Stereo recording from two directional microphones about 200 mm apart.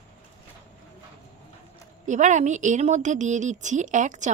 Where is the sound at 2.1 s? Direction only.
35° right (ahead or behind).